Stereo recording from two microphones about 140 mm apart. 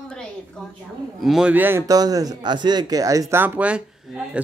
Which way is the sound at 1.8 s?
25° right (ahead or behind).